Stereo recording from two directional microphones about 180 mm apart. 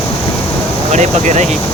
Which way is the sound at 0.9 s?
40° right (ahead or behind).